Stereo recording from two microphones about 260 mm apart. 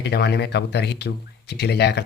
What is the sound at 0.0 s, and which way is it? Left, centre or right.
Speech, left.